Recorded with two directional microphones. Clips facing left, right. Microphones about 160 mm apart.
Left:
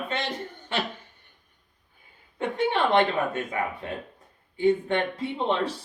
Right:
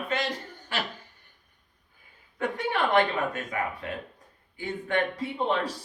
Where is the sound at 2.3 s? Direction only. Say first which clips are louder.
Left 3 dB; 25° left (ahead or behind).